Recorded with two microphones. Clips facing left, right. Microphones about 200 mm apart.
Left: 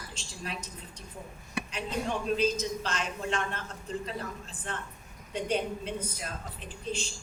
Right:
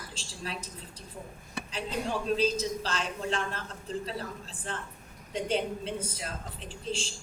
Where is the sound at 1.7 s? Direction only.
35° right (ahead or behind).